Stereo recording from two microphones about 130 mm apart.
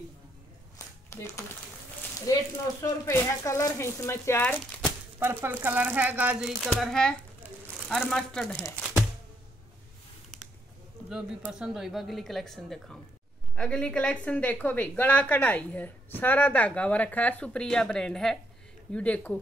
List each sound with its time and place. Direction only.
0.7 s a sound: 25° left (ahead or behind)
2.8 s speech: 25° left (ahead or behind)
5.2 s speech: 15° right (ahead or behind); by 8.6 s 5° left (ahead or behind)
11.1 s a woman's voice: 5° right (ahead or behind); by 19.3 s 10° left (ahead or behind)